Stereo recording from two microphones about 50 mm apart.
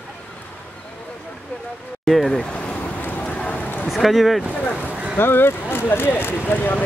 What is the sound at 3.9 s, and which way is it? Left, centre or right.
Speech, centre.